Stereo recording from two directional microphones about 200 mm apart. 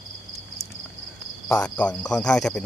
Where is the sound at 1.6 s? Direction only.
5° left (ahead or behind).